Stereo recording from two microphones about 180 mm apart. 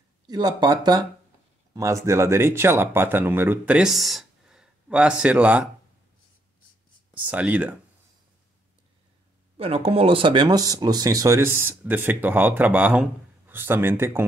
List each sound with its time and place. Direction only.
0.3 s speech: 20° right (ahead or behind)
7.2 s speech: 10° right (ahead or behind)
9.6 s speech: 30° right (ahead or behind); by 14.2 s 15° right (ahead or behind)